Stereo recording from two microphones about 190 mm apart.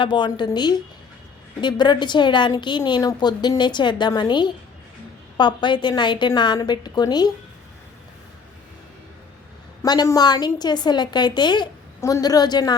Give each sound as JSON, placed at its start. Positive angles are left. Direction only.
{"t": 0.0, "sound": "a woman's voice", "side_deg": 25}
{"t": 9.8, "sound": "a woman's voice", "side_deg": 20}